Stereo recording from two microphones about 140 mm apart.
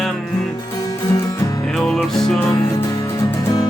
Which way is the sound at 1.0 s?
25° left (ahead or behind).